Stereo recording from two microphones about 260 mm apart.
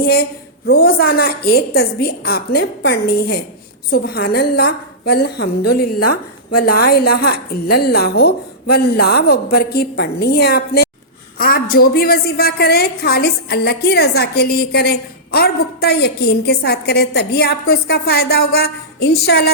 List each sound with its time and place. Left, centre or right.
0.0 s a woman's voice: left
6.0 s a woman's voice: left
6.6 s a woman's voice: left